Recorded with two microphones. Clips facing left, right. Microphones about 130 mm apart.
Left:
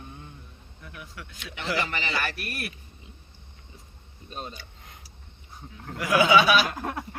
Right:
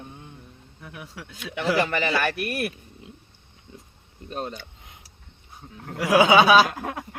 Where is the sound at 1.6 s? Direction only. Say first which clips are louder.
Right 7 dB; 55° right (ahead or behind).